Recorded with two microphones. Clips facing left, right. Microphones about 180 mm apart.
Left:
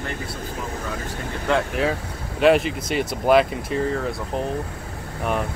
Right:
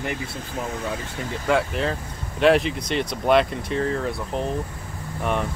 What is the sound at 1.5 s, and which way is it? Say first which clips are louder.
Speech: left 1 dB; 5° right (ahead or behind).